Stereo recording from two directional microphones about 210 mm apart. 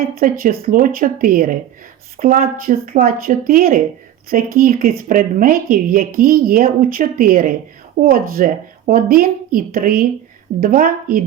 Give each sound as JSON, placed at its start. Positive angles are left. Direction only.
{"t": 0.0, "sound": "a woman's voice", "side_deg": -45}